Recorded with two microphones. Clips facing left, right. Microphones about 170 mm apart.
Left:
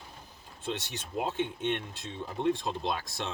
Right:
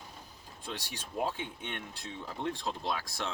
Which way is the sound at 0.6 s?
20° left (ahead or behind).